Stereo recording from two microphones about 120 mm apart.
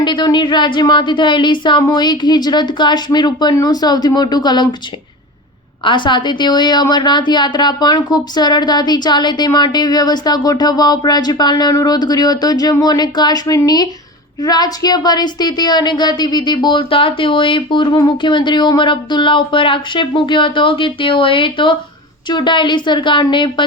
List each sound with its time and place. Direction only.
0.0 s speech: 40° left (ahead or behind)
5.8 s speech: 40° left (ahead or behind)